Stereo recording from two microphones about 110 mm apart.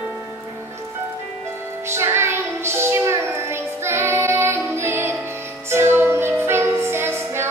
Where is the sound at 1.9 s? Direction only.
25° right (ahead or behind).